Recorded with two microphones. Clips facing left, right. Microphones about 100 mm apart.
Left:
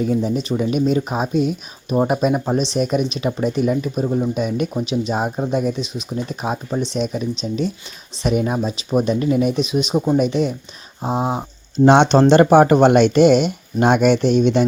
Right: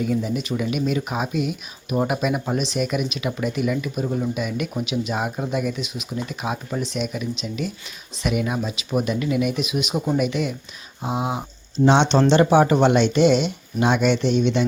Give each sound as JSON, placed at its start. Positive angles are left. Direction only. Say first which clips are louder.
{"t": 0.0, "sound": "speech", "louder": "left 4 dB", "side_deg": 35}
{"t": 11.9, "sound": "speech", "louder": "left 5 dB", "side_deg": 50}